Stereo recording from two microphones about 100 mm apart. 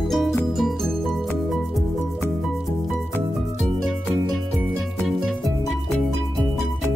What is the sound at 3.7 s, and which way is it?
Music, 5° left (ahead or behind).